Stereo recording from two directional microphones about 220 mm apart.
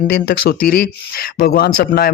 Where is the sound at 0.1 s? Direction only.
45° left (ahead or behind).